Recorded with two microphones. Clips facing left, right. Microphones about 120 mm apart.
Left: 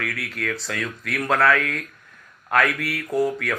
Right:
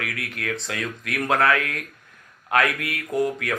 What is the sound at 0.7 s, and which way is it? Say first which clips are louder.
Speech: left 1 dB; 20° right (ahead or behind).